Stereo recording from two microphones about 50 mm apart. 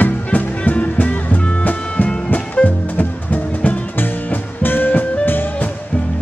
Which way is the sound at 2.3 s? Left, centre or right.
Left.